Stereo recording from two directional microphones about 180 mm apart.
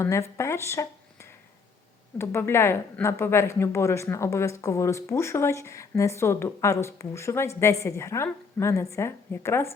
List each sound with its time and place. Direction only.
0.0 s a woman's voice: 15° left (ahead or behind)